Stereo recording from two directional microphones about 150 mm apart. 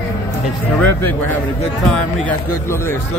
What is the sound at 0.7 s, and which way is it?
Speech, 10° left (ahead or behind).